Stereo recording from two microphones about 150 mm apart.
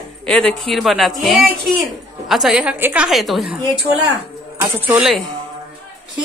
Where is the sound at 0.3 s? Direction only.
5° left (ahead or behind).